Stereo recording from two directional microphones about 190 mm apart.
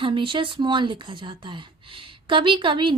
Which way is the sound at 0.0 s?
25° right (ahead or behind).